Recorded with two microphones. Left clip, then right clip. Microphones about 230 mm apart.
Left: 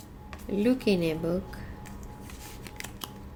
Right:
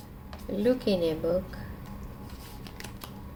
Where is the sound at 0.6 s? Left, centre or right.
Left.